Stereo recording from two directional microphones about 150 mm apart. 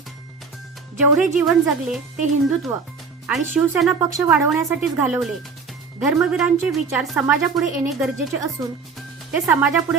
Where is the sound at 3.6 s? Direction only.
5° right (ahead or behind).